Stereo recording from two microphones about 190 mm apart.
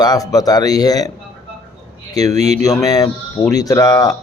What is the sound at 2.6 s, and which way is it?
Speech, 20° left (ahead or behind).